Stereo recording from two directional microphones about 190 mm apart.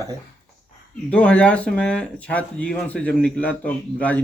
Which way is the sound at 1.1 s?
5° left (ahead or behind).